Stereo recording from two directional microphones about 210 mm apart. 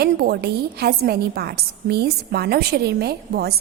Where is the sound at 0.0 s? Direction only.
50° right (ahead or behind).